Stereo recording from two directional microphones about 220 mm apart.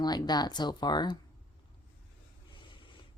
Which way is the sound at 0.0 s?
20° left (ahead or behind).